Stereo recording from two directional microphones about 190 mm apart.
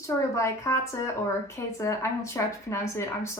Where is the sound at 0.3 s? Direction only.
15° left (ahead or behind).